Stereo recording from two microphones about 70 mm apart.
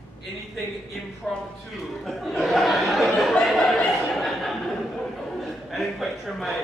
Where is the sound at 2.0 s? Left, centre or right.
Centre.